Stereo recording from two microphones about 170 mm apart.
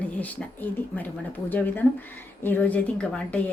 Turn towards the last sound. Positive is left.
turn(degrees=5)  # may be behind; listen again after turning